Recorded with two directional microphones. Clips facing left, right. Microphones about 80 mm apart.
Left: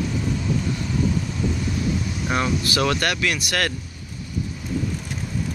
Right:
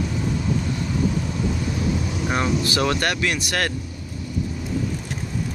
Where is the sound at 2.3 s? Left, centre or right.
Right.